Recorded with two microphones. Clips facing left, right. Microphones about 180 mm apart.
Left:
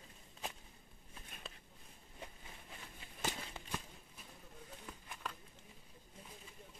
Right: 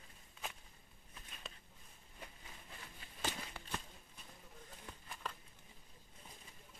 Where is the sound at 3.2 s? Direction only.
15° left (ahead or behind).